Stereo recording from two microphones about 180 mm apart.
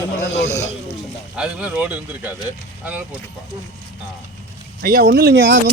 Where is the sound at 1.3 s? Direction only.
5° right (ahead or behind).